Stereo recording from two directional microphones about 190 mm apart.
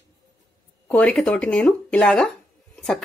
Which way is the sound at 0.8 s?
5° left (ahead or behind).